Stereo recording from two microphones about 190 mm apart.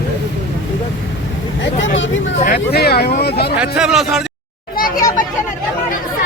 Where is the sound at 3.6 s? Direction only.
5° right (ahead or behind).